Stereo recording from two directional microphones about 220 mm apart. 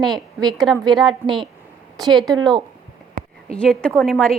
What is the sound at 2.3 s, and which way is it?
Speech, 20° right (ahead or behind).